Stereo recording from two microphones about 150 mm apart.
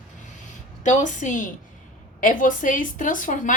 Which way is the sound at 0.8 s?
55° left (ahead or behind).